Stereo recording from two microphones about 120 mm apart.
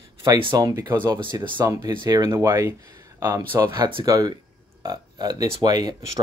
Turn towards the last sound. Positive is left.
turn(degrees=-35)  # may be behind; listen again after turning